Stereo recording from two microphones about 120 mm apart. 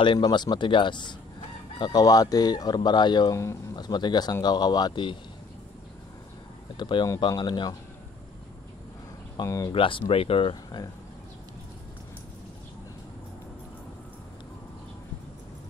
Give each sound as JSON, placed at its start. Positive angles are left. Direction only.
{"t": 0.0, "sound": "speech", "side_deg": 40}
{"t": 6.8, "sound": "speech", "side_deg": 40}
{"t": 9.4, "sound": "speech", "side_deg": 30}
{"t": 9.7, "sound": "speech", "side_deg": 45}
{"t": 10.5, "sound": "speech", "side_deg": 35}